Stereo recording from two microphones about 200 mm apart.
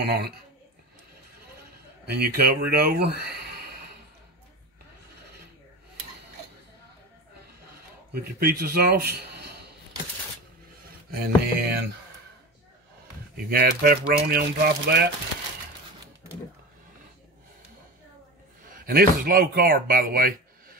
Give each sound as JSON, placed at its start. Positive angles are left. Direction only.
{"t": 0.0, "sound": "a man's voice", "side_deg": -55}
{"t": 2.0, "sound": "speech", "side_deg": -55}
{"t": 8.1, "sound": "a man's voice", "side_deg": -50}
{"t": 11.1, "sound": "speech", "side_deg": -50}
{"t": 13.5, "sound": "speech", "side_deg": -50}
{"t": 18.7, "sound": "speech", "side_deg": -45}